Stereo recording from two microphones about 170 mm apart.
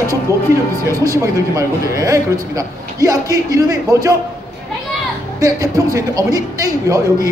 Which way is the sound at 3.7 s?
20° right (ahead or behind).